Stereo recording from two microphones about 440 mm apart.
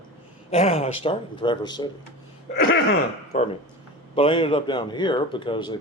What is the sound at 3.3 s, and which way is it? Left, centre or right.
Speech, centre.